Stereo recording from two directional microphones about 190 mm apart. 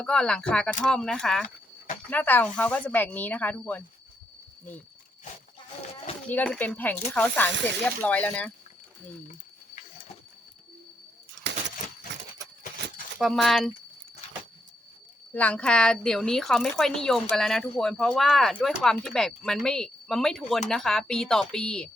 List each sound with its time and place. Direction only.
0.0 s a woman's voice: 5° left (ahead or behind)
6.2 s speech: 5° left (ahead or behind)
11.4 s a sound: 70° right (ahead or behind)
13.1 s a woman's voice: centre (ahead or behind)
15.4 s a woman's voice: 5° left (ahead or behind)